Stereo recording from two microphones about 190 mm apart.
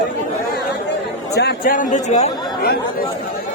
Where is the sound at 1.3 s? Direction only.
60° left (ahead or behind); by 2.3 s 40° left (ahead or behind).